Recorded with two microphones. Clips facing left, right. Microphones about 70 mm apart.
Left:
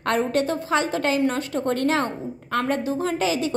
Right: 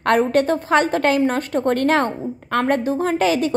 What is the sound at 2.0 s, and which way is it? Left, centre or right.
Speech, right.